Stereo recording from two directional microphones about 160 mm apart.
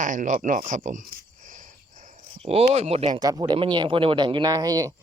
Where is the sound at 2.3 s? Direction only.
40° right (ahead or behind).